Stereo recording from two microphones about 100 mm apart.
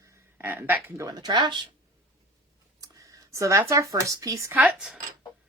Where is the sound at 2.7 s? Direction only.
35° right (ahead or behind).